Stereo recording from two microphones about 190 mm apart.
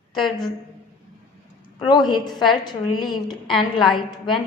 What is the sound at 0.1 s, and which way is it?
Speech, 25° left (ahead or behind).